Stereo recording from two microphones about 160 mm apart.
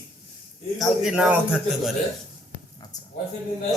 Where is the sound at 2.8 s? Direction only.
25° left (ahead or behind).